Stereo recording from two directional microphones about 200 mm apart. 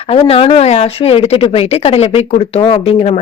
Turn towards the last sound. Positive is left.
turn(degrees=30)  # may be behind; listen again after turning